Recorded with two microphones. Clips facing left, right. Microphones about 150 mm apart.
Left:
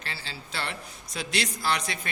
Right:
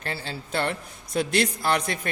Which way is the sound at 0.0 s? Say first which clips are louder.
Right 7 dB; 50° right (ahead or behind).